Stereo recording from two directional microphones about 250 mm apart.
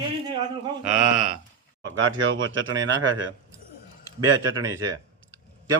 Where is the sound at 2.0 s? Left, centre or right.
Right.